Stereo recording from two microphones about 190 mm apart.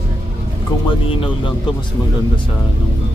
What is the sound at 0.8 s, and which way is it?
Speech, 25° left (ahead or behind).